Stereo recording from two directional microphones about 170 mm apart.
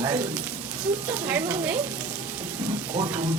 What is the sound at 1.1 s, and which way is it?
Speech, 10° right (ahead or behind).